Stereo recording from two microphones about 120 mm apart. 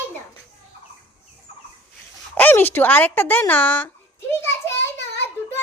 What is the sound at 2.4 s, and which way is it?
A woman's voice, 15° left (ahead or behind).